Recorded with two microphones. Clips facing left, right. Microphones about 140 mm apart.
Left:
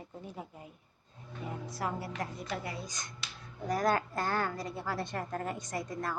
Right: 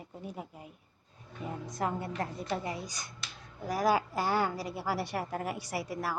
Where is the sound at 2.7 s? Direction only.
10° right (ahead or behind).